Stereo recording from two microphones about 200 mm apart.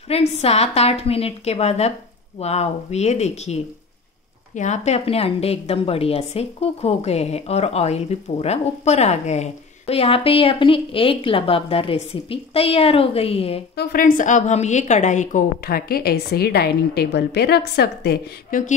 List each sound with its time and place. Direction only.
0.1 s a woman's voice: 30° left (ahead or behind)
13.7 s a woman's voice: 45° left (ahead or behind)